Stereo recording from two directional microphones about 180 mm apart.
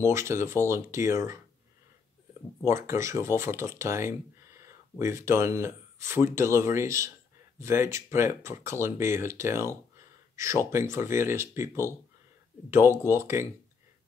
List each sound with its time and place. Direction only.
0.0 s speech: 15° right (ahead or behind)
2.6 s speech: 15° right (ahead or behind)